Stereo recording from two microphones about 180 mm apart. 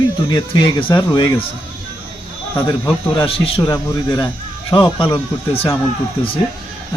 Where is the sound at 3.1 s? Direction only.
25° left (ahead or behind).